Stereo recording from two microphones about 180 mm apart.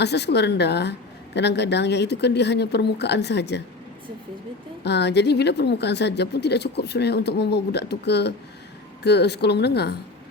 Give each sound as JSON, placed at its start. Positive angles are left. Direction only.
{"t": 0.0, "sound": "a woman's voice", "side_deg": 70}
{"t": 4.8, "sound": "a woman's voice", "side_deg": 70}